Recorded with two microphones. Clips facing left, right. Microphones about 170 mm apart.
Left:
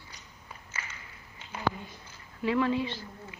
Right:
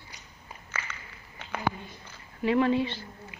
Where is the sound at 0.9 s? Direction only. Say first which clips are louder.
Right 5 dB; 65° right (ahead or behind).